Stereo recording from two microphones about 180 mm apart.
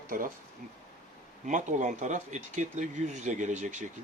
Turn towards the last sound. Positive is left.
turn(degrees=-45)  # may be behind; listen again after turning